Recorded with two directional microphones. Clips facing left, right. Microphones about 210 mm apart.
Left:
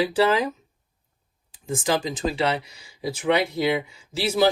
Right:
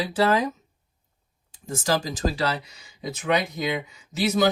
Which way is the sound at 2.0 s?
25° left (ahead or behind).